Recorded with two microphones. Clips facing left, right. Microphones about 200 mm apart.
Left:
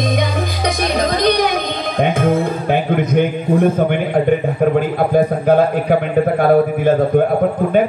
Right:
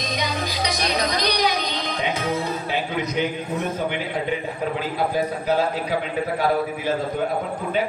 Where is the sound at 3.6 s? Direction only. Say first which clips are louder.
Left 10 dB; 50° left (ahead or behind).